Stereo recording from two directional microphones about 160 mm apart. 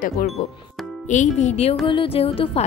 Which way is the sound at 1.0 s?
50° left (ahead or behind).